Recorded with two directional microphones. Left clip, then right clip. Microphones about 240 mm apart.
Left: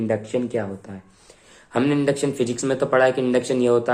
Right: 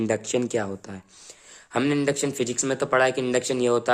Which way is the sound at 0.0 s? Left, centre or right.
Right.